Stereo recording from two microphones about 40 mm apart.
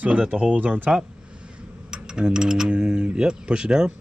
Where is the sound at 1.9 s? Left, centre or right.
Centre.